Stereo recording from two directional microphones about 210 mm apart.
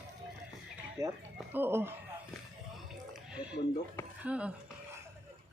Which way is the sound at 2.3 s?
Centre (ahead or behind).